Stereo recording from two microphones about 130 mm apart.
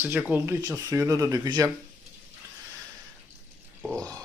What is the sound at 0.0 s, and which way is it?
Speech, 10° right (ahead or behind).